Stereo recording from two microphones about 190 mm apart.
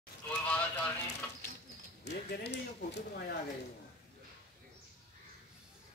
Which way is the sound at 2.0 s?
65° left (ahead or behind).